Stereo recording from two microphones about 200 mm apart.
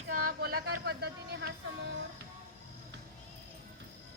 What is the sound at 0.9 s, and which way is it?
Speech, 55° right (ahead or behind).